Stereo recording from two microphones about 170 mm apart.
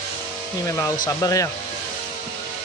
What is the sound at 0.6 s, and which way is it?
Speech, 20° left (ahead or behind).